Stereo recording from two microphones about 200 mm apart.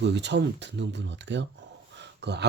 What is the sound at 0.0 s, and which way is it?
Speech, 60° right (ahead or behind).